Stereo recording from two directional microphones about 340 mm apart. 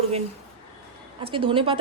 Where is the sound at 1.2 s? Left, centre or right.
Centre.